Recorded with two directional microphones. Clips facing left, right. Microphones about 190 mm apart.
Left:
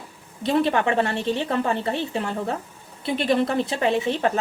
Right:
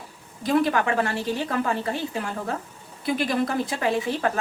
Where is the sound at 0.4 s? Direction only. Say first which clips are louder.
Left 1 dB; 25° left (ahead or behind).